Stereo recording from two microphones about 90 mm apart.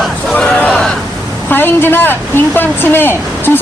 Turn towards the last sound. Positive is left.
turn(degrees=25)  # may be behind; listen again after turning